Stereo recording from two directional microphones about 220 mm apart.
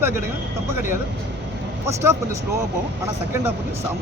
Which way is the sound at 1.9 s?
10° right (ahead or behind).